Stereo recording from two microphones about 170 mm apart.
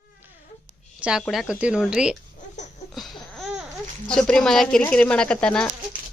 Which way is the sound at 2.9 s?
Centre (ahead or behind).